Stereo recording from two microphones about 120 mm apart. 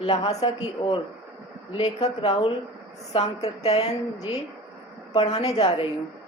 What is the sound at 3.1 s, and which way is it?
Speech, 60° left (ahead or behind).